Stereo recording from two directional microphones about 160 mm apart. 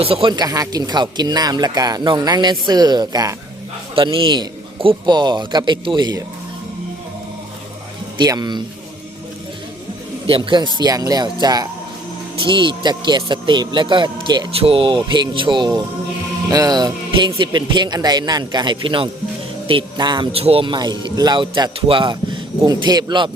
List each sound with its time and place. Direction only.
0.0 s speech: 35° right (ahead or behind)
8.2 s speech: 25° right (ahead or behind)
10.2 s speech: 30° right (ahead or behind)